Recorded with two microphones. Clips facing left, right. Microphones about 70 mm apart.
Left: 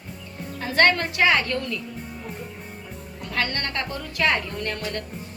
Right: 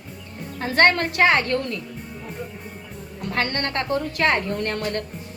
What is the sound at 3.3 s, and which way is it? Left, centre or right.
A woman's voice, right.